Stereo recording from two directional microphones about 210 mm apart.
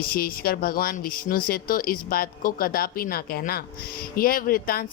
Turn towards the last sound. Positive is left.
turn(degrees=45)  # may be behind; listen again after turning